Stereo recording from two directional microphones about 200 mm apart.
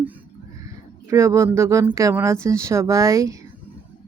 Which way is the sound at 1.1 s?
15° right (ahead or behind).